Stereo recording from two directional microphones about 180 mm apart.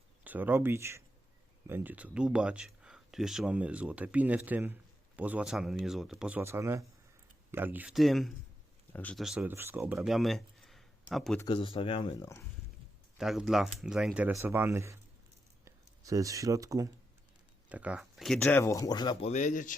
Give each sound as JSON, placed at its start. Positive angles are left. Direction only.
{"t": 0.3, "sound": "speech", "side_deg": -10}
{"t": 9.2, "sound": "speech", "side_deg": -5}
{"t": 10.1, "sound": "a sound", "side_deg": 0}
{"t": 11.3, "sound": "speech", "side_deg": 25}
{"t": 13.1, "sound": "speech", "side_deg": 0}
{"t": 17.7, "sound": "speech", "side_deg": -5}
{"t": 18.6, "sound": "speech", "side_deg": 15}
{"t": 19.3, "sound": "speech", "side_deg": 40}